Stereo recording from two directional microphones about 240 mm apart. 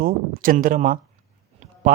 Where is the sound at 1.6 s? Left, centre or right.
Right.